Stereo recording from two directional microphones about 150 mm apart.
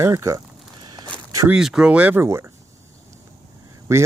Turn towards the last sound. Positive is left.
turn(degrees=-20)  # may be behind; listen again after turning